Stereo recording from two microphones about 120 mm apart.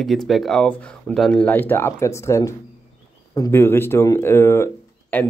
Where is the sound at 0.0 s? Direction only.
Centre (ahead or behind).